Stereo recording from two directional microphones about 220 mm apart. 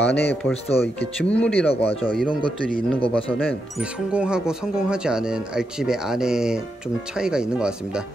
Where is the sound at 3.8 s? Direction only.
5° right (ahead or behind).